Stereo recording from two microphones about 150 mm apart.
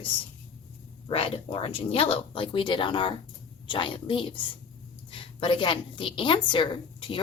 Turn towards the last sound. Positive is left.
turn(degrees=35)  # may be behind; listen again after turning